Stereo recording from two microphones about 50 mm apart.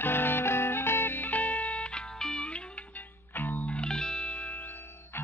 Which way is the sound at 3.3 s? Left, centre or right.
Left.